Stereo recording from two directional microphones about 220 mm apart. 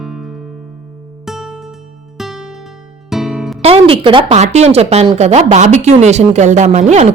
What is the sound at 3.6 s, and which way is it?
Speech, 25° right (ahead or behind).